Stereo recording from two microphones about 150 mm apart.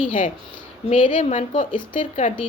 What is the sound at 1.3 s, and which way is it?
Speech, 55° left (ahead or behind).